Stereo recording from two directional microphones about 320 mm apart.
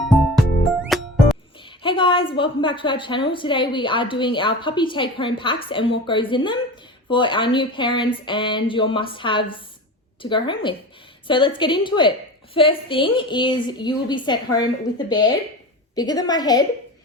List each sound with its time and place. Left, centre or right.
0.9 s music: centre
1.6 s a sound: centre
2.4 s a woman's voice: centre